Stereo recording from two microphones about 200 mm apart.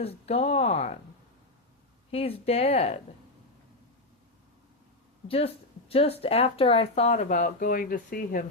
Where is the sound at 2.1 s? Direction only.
30° left (ahead or behind).